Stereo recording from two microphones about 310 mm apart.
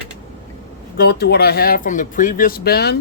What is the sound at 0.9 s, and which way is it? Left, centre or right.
Speech, left.